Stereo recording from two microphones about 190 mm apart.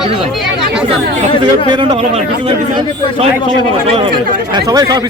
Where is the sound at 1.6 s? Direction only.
25° right (ahead or behind).